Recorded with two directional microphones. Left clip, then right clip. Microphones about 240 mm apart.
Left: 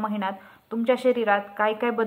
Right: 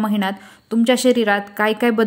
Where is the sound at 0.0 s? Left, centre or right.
Right.